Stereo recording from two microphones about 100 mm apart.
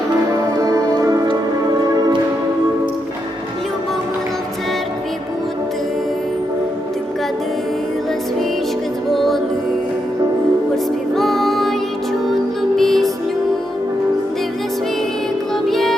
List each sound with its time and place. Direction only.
0.6 s music: 35° right (ahead or behind)
9.1 s music: centre (ahead or behind)
11.1 s music: 5° left (ahead or behind)
15.6 s music: 5° left (ahead or behind)